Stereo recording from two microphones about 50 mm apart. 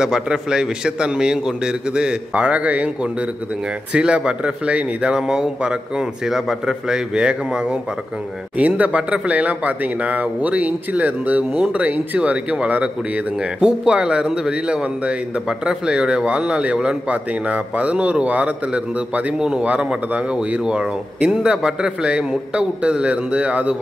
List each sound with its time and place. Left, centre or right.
0.0 s a man's voice: centre
8.5 s a man's voice: right
17.1 s a man's voice: right
19.6 s a man's voice: right